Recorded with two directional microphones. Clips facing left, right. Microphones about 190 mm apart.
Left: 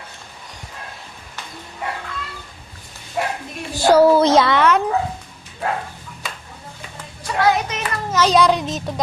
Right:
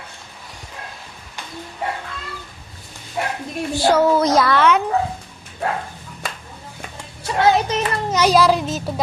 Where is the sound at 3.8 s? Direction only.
35° left (ahead or behind).